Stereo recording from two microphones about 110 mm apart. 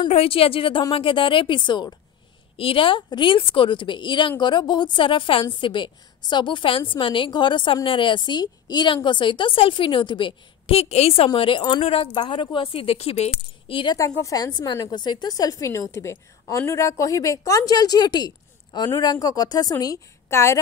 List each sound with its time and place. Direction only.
0.1 s a woman's voice: 60° left (ahead or behind); by 2.0 s 45° left (ahead or behind)
2.5 s a woman's voice: 55° left (ahead or behind)
11.2 s a woman's voice: 50° left (ahead or behind)
11.8 s a woman's voice: 55° left (ahead or behind); by 13.3 s 75° left (ahead or behind)
13.7 s speech: 50° left (ahead or behind)
13.9 s a woman's voice: 30° left (ahead or behind)